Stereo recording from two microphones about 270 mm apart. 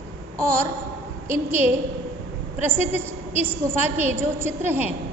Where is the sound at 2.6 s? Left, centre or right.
Centre.